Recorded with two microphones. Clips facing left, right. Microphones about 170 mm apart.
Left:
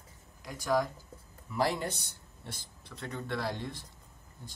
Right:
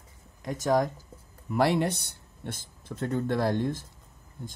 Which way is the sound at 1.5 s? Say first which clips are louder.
Right 7 dB; 65° right (ahead or behind).